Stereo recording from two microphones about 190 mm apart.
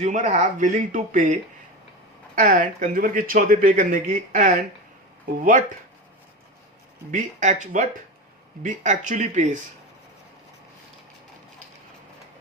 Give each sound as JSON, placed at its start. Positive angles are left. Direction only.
{"t": 0.0, "sound": "speech", "side_deg": -40}
{"t": 7.1, "sound": "speech", "side_deg": -40}